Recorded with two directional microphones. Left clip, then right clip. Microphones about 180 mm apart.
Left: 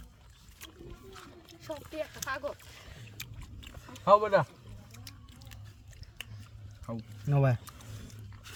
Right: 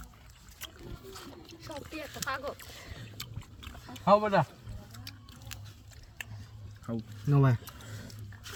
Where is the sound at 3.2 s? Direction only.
15° left (ahead or behind).